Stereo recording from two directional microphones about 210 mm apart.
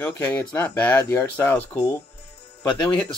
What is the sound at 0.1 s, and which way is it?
Speech, 10° left (ahead or behind).